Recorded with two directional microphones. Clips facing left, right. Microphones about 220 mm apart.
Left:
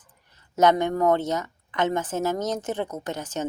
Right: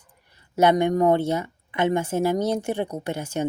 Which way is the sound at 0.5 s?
10° right (ahead or behind).